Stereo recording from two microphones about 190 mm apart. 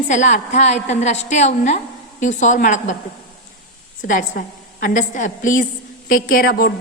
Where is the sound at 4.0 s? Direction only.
45° left (ahead or behind).